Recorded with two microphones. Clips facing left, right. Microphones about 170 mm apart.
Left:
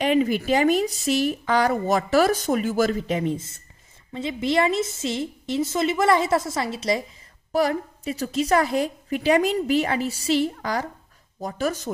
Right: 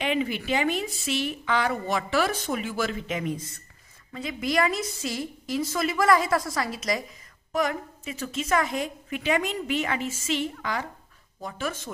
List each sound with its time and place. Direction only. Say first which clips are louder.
0.0 s a woman's voice: left 6 dB; 40° left (ahead or behind)